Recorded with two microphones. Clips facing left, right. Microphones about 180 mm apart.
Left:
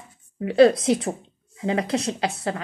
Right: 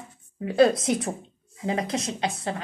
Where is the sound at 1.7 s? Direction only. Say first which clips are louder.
Left 4 dB; 30° left (ahead or behind).